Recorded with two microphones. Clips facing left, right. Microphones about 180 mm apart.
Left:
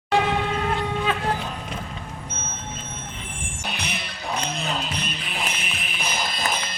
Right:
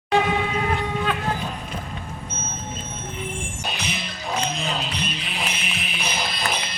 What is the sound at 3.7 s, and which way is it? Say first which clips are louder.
Music: even; 60° left (ahead or behind).